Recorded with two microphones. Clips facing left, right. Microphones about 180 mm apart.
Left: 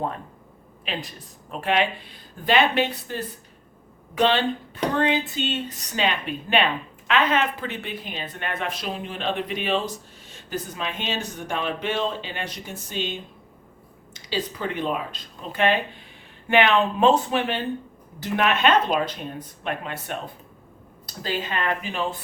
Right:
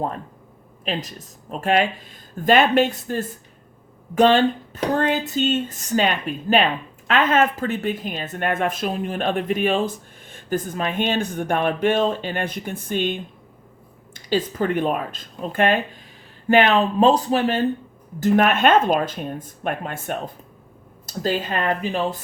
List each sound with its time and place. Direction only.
0.9 s speech: 45° right (ahead or behind)